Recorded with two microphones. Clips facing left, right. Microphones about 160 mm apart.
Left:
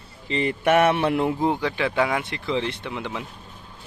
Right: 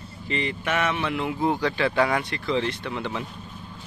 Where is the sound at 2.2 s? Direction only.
20° left (ahead or behind).